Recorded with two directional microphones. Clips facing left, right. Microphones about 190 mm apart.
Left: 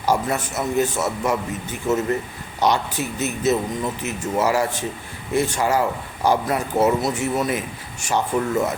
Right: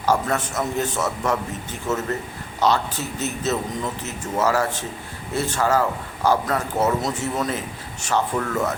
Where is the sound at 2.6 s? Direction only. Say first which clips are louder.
Left 1 dB; 15° left (ahead or behind).